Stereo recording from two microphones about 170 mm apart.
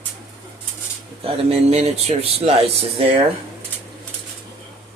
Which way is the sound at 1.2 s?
35° right (ahead or behind).